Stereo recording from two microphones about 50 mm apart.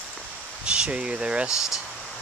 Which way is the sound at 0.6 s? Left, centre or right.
Centre.